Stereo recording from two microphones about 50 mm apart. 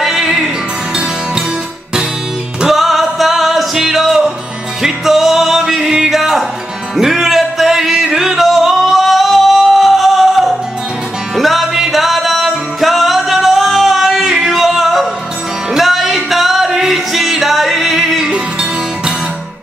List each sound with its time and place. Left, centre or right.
0.0 s music: centre
2.7 s music: centre
18.3 s music: centre